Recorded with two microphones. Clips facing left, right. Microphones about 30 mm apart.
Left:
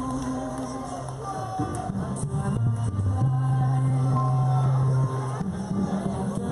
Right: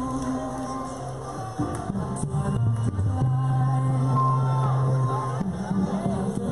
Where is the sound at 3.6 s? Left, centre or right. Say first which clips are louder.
Right 1 dB; centre.